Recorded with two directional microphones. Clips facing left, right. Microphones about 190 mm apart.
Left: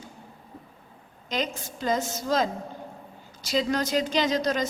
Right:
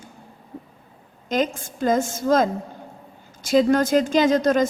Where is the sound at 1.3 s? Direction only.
50° right (ahead or behind).